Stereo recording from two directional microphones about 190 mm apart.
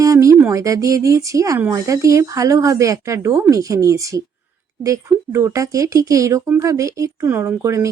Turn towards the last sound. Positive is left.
turn(degrees=-15)  # may be behind; listen again after turning